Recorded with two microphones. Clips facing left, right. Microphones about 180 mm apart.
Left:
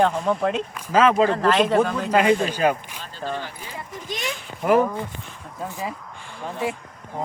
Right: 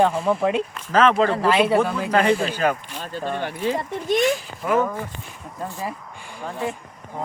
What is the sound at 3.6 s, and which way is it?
Speech, 75° right (ahead or behind).